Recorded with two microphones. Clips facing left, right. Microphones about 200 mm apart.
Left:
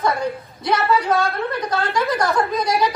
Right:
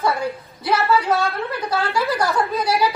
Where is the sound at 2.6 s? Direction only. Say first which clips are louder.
Even; 30° right (ahead or behind).